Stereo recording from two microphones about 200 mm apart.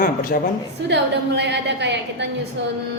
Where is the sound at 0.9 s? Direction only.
60° right (ahead or behind).